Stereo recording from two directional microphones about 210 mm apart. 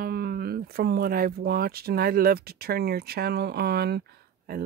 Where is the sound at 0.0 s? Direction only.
45° right (ahead or behind).